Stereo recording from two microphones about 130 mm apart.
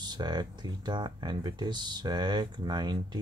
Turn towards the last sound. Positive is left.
turn(degrees=-35)  # may be behind; listen again after turning